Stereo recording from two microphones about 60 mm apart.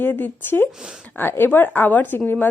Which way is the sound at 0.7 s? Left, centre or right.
Centre.